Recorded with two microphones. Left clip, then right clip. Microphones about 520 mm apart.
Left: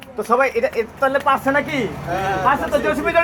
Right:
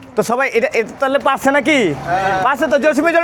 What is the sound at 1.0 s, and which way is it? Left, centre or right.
Speech, right.